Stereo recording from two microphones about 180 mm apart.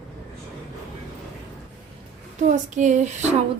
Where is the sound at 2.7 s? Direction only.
40° right (ahead or behind).